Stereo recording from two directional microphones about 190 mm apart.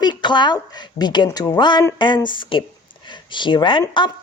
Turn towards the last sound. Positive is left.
turn(degrees=25)  # may be behind; listen again after turning